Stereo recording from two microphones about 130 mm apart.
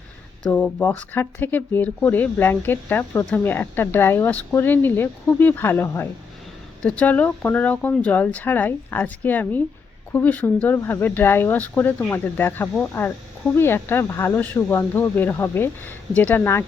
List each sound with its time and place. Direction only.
0.5 s speech: 10° left (ahead or behind)